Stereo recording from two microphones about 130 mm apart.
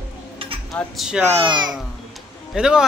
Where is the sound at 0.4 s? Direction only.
45° right (ahead or behind).